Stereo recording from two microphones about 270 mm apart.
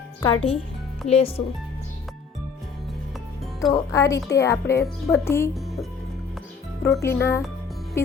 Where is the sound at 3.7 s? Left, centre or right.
Centre.